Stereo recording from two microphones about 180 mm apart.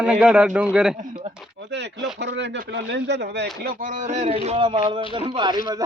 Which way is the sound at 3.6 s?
50° right (ahead or behind).